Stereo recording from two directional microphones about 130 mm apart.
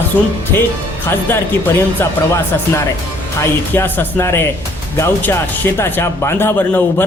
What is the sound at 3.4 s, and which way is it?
A man's voice, 15° left (ahead or behind).